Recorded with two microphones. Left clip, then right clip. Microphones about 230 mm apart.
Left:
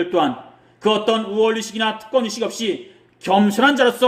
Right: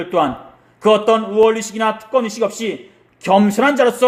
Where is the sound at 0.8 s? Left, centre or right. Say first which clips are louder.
Right 5 dB; centre.